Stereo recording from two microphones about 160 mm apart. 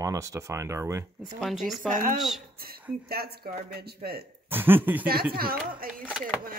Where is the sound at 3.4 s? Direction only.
65° right (ahead or behind).